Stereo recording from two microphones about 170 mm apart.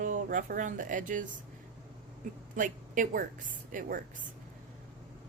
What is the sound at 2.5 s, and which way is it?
Speech, 50° right (ahead or behind).